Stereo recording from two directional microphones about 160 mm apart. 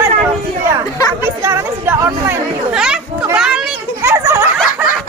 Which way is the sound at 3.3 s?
5° right (ahead or behind).